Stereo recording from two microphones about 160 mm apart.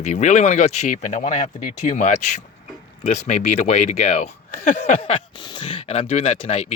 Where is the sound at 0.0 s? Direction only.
50° left (ahead or behind).